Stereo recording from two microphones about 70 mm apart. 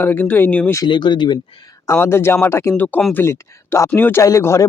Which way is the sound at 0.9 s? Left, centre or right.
Left.